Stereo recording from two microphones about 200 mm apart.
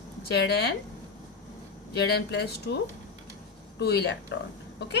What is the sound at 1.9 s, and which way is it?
Speech, 55° left (ahead or behind).